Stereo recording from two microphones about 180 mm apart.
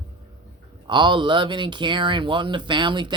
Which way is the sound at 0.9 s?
25° right (ahead or behind).